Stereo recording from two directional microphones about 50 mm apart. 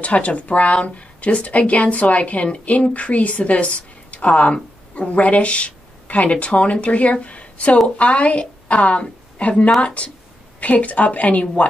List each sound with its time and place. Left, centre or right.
0.0 s a woman's voice: left